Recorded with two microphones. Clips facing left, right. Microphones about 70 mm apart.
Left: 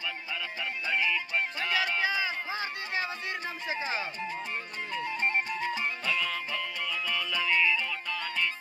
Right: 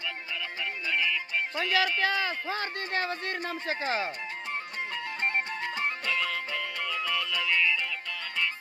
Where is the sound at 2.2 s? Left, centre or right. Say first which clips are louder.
Right 2 dB; right.